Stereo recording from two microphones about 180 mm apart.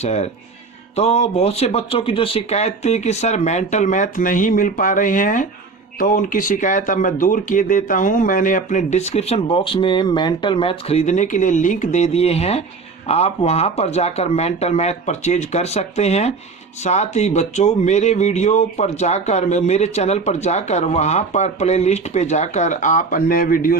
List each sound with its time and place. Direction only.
0.0 s speech: 35° left (ahead or behind); by 23.7 s 50° left (ahead or behind)